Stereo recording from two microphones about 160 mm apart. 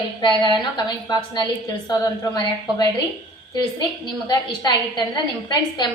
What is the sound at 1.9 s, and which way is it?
Speech, 25° left (ahead or behind).